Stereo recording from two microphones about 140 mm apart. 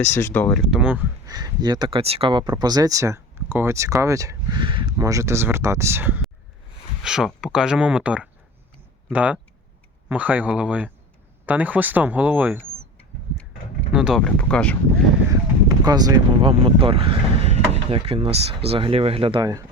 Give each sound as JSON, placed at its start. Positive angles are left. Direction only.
{"t": 0.1, "sound": "speech", "side_deg": 15}
{"t": 0.5, "sound": "speech", "side_deg": -5}
{"t": 1.3, "sound": "speech", "side_deg": -30}
{"t": 2.0, "sound": "speech", "side_deg": -45}
{"t": 4.9, "sound": "speech", "side_deg": -25}
{"t": 7.0, "sound": "speech", "side_deg": -5}
{"t": 13.9, "sound": "speech", "side_deg": -5}
{"t": 15.3, "sound": "speech", "side_deg": -25}
{"t": 19.4, "sound": "speech", "side_deg": -25}